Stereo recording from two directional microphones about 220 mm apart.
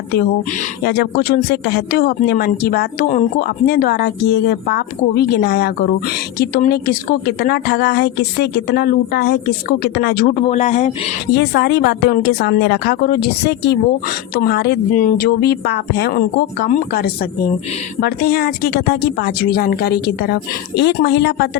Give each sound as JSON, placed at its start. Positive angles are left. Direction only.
{"t": 0.9, "sound": "speech", "side_deg": 45}
{"t": 11.3, "sound": "speech", "side_deg": 45}